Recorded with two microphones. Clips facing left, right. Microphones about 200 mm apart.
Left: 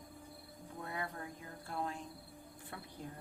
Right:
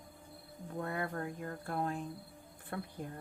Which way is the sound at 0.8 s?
55° right (ahead or behind).